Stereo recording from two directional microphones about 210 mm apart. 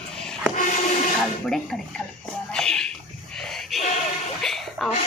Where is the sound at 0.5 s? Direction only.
40° left (ahead or behind).